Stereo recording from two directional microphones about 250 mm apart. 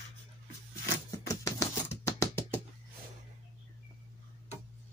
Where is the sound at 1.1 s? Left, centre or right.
Centre.